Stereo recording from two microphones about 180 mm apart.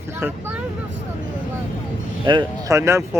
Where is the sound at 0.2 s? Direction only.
10° right (ahead or behind).